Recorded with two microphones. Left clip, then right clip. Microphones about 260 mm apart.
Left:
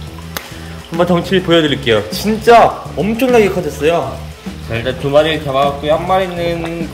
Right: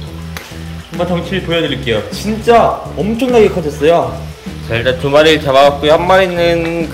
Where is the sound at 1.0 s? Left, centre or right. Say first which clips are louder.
Left 4 dB; centre.